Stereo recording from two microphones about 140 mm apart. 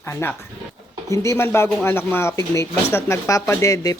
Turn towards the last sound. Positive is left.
turn(degrees=20)  # may be behind; listen again after turning